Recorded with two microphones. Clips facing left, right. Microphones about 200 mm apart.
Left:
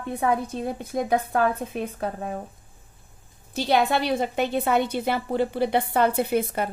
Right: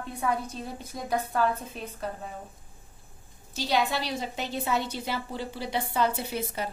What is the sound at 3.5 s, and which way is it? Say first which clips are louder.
A woman's voice: left 6 dB; 55° left (ahead or behind).